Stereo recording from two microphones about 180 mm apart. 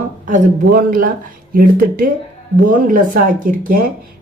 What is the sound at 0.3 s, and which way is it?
Speech, 50° right (ahead or behind).